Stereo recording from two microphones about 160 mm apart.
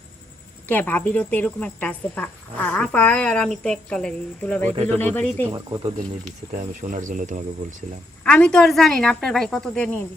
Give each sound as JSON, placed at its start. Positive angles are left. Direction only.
{"t": 0.7, "sound": "a woman's voice", "side_deg": 10}
{"t": 5.5, "sound": "speech", "side_deg": -25}
{"t": 6.5, "sound": "speech", "side_deg": -55}
{"t": 8.2, "sound": "a woman's voice", "side_deg": 5}